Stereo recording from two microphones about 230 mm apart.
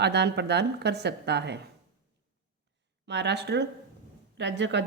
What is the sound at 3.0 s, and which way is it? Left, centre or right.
A woman's voice, right.